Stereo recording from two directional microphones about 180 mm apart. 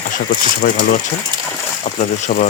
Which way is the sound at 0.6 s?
55° left (ahead or behind).